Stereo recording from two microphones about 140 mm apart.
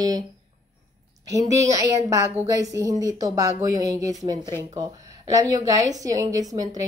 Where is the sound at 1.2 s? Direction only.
25° right (ahead or behind).